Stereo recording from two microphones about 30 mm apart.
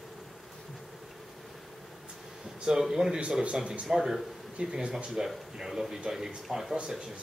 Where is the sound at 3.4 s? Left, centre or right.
Right.